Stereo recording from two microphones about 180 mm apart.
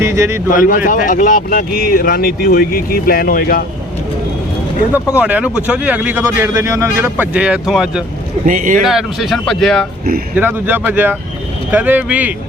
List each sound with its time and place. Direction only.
0.0 s speech: 15° right (ahead or behind)
0.5 s speech: 50° left (ahead or behind)
5.1 s speech: 5° right (ahead or behind)
8.4 s speech: 45° right (ahead or behind)
8.8 s speech: centre (ahead or behind)
10.3 s speech: 10° right (ahead or behind)